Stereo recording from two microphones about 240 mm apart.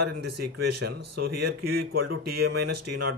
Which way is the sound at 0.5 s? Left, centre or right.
Right.